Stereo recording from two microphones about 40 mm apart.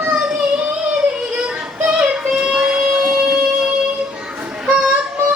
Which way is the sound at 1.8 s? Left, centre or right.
Right.